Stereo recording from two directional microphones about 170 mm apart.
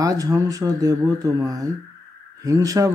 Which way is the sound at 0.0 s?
20° right (ahead or behind).